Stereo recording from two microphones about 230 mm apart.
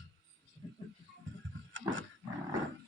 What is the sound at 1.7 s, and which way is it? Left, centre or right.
Wild animals, right.